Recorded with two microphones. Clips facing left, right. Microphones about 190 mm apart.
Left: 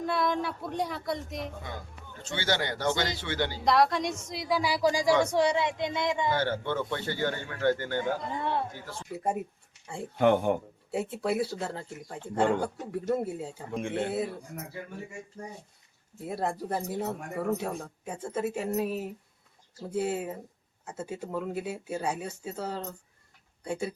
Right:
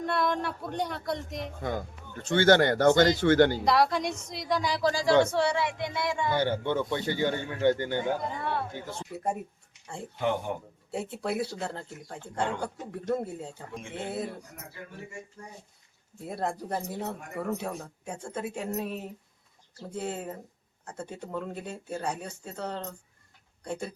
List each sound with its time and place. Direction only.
0.0 s speech: centre (ahead or behind)
2.2 s speech: 55° right (ahead or behind)
3.6 s speech: centre (ahead or behind); by 6.3 s 20° left (ahead or behind)
6.3 s a man's voice: 15° right (ahead or behind)
9.1 s speech: centre (ahead or behind)
10.2 s speech: 55° left (ahead or behind)
10.9 s speech: centre (ahead or behind)
13.7 s speech: 60° left (ahead or behind)
16.2 s speech: centre (ahead or behind)